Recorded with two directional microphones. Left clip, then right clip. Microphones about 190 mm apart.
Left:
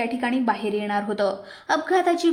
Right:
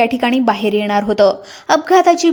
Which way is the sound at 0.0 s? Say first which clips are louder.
Right 10 dB; 35° right (ahead or behind).